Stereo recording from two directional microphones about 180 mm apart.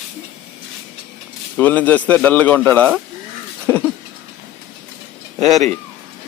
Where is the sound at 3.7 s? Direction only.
5° left (ahead or behind).